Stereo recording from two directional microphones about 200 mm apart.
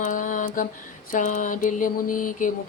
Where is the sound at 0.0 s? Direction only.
40° left (ahead or behind).